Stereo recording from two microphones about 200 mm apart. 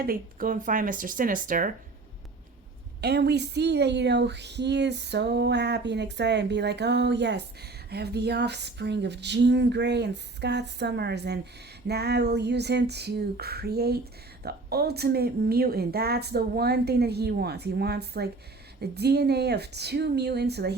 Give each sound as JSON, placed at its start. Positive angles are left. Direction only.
{"t": 0.0, "sound": "speech", "side_deg": -45}
{"t": 3.0, "sound": "speech", "side_deg": -55}